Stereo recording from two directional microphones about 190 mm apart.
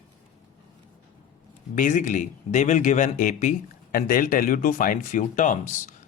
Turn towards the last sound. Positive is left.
turn(degrees=40)  # may be behind; listen again after turning